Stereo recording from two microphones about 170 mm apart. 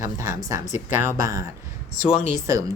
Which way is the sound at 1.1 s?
20° right (ahead or behind).